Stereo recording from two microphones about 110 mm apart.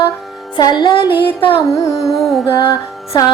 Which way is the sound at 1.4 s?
55° left (ahead or behind).